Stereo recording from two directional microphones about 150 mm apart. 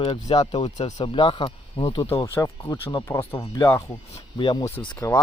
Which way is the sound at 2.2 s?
20° left (ahead or behind).